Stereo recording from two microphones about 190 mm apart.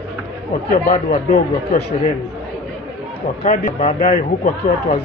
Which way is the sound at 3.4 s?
40° left (ahead or behind).